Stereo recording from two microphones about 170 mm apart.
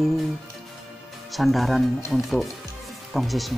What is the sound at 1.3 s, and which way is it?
Speech, centre (ahead or behind).